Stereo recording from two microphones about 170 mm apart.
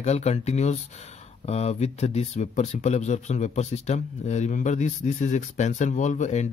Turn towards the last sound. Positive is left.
turn(degrees=45)  # may be behind; listen again after turning